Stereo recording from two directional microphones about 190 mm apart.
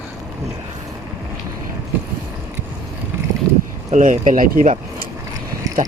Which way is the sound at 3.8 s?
40° right (ahead or behind).